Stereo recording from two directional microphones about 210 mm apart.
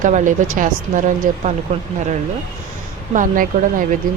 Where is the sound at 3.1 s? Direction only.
40° right (ahead or behind).